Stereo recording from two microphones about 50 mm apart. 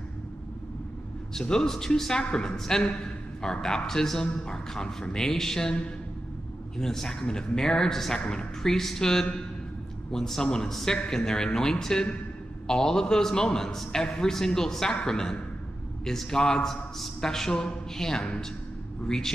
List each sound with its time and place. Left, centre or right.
1.3 s a man's voice: centre